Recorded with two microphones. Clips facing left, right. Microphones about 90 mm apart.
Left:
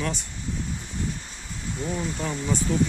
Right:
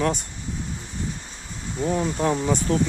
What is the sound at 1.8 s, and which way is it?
Speech, 40° right (ahead or behind).